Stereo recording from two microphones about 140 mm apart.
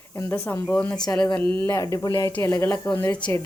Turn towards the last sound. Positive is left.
turn(degrees=25)  # may be behind; listen again after turning